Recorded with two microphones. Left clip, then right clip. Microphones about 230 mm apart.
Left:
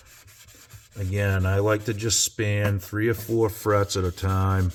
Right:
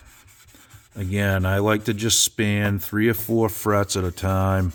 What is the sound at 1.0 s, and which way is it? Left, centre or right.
Speech, right.